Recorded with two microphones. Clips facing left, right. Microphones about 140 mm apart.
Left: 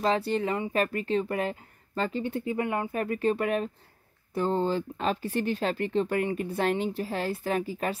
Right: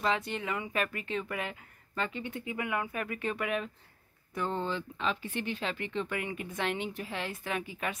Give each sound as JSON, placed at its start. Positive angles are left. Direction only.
{"t": 0.0, "sound": "speech", "side_deg": 35}